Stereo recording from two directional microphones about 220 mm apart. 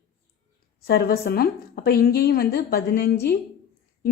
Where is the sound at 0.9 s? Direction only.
45° left (ahead or behind).